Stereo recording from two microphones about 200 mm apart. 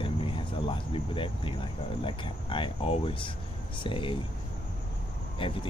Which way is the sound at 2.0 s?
25° left (ahead or behind).